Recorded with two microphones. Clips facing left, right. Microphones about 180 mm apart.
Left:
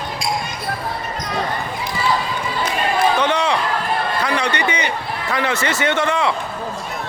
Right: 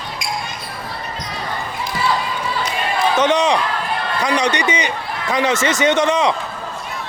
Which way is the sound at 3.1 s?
20° right (ahead or behind).